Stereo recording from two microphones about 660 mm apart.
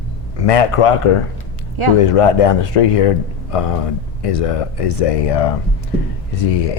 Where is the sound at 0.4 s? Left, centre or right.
Left.